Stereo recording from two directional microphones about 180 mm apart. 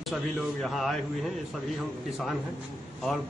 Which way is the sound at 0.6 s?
Centre (ahead or behind).